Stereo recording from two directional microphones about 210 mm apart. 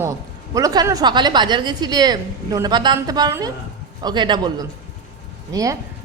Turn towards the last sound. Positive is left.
turn(degrees=-15)  # may be behind; listen again after turning